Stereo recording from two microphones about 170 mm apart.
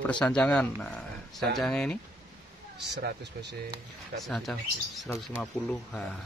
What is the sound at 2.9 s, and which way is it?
Speech, 85° right.